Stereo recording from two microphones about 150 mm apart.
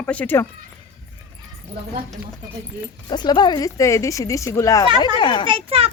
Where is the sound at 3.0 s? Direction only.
30° left (ahead or behind).